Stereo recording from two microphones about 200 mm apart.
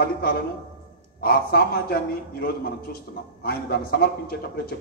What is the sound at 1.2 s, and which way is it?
Speech, 50° left (ahead or behind).